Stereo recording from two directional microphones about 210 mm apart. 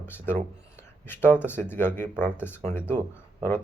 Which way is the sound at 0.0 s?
10° left (ahead or behind).